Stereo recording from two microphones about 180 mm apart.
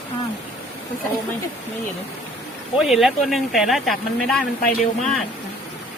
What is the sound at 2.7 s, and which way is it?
Speech, centre (ahead or behind).